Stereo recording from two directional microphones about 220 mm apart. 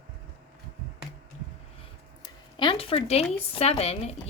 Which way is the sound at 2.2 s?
20° left (ahead or behind).